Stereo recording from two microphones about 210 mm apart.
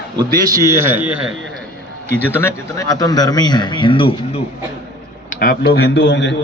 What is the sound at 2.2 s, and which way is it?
Speech, 10° left (ahead or behind).